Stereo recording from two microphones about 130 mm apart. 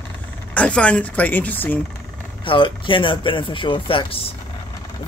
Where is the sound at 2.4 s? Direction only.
40° left (ahead or behind).